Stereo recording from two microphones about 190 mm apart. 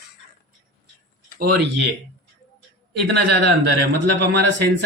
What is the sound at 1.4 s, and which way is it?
Speech, 55° right (ahead or behind).